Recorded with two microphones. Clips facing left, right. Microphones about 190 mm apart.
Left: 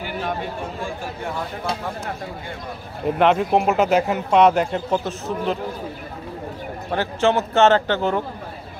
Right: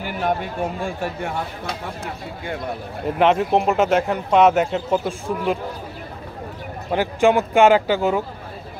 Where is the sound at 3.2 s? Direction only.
Centre (ahead or behind).